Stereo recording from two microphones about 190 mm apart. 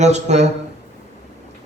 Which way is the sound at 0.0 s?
35° right (ahead or behind).